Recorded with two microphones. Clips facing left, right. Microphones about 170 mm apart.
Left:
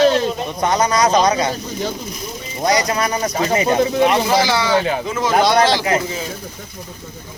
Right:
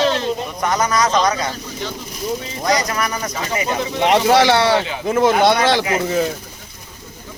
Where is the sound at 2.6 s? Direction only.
25° left (ahead or behind).